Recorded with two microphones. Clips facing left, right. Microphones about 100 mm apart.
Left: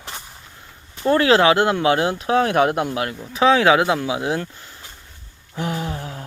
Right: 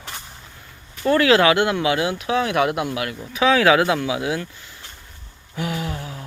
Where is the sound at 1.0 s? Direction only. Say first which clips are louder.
Left 1 dB; 30° left (ahead or behind).